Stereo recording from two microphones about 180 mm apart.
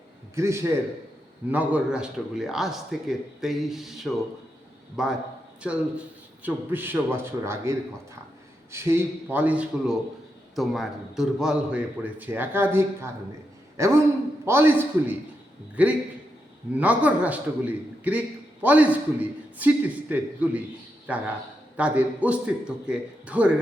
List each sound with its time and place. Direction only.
0.3 s a man's voice: 15° right (ahead or behind)
6.4 s a man's voice: 10° right (ahead or behind)